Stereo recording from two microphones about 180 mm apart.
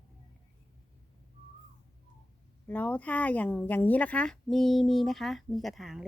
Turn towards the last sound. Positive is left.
turn(degrees=0)  # may be behind; listen again after turning